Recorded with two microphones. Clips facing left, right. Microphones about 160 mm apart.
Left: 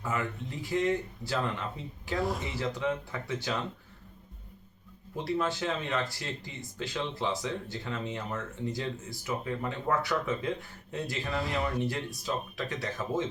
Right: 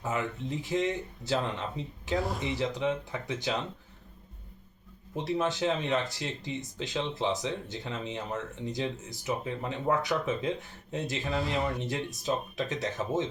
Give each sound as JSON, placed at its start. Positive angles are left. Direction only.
{"t": 0.0, "sound": "speech", "side_deg": -20}
{"t": 2.1, "sound": "speech", "side_deg": 0}
{"t": 2.4, "sound": "speech", "side_deg": -20}
{"t": 5.1, "sound": "speech", "side_deg": -20}
{"t": 11.3, "sound": "speech", "side_deg": 0}
{"t": 11.8, "sound": "speech", "side_deg": -20}